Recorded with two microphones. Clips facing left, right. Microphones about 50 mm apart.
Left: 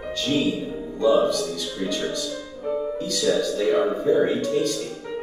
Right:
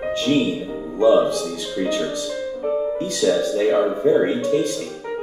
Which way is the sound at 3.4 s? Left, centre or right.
Right.